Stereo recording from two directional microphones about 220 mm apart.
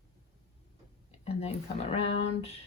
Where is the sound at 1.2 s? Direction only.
30° left (ahead or behind).